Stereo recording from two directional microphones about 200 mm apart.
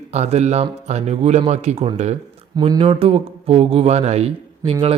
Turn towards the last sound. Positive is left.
turn(degrees=-30)  # may be behind; listen again after turning